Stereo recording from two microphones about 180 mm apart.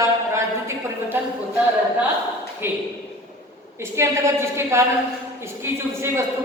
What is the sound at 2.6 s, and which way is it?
A woman's voice, 10° right (ahead or behind).